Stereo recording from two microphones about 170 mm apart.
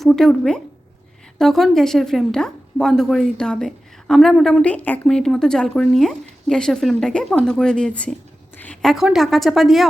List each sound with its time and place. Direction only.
0.0 s a woman's voice: 5° left (ahead or behind)